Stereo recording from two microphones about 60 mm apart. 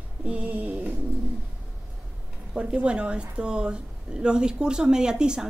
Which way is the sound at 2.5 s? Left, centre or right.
Centre.